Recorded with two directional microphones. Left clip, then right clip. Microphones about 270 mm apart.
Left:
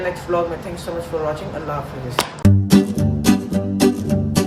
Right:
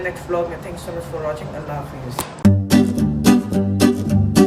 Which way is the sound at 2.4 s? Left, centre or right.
Centre.